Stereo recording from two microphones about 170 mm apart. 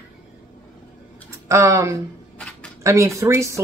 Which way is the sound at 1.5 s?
20° right (ahead or behind).